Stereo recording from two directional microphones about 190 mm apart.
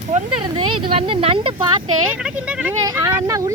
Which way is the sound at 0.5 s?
25° right (ahead or behind).